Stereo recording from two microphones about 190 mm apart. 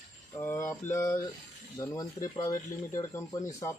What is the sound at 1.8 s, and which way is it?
Speech, 20° left (ahead or behind).